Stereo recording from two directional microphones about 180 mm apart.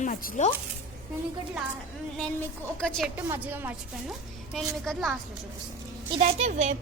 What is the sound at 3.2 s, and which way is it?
Speech, 10° right (ahead or behind).